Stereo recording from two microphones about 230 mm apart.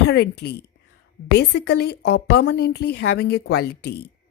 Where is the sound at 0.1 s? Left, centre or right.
Left.